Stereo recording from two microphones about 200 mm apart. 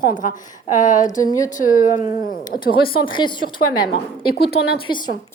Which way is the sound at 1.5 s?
40° left (ahead or behind).